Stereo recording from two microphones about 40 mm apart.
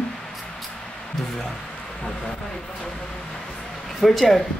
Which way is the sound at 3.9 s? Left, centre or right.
Centre.